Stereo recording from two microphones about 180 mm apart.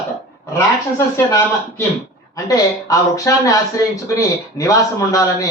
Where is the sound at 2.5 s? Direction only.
20° left (ahead or behind).